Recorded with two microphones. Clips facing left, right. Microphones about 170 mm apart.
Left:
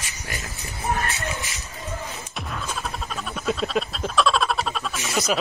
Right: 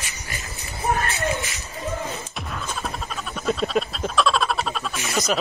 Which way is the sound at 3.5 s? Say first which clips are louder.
Right 2 dB; centre (ahead or behind).